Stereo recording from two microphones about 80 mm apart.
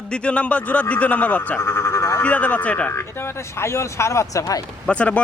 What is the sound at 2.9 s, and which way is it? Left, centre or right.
Speech, left.